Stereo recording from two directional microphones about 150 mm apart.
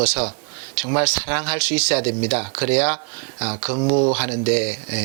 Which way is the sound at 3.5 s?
35° right (ahead or behind).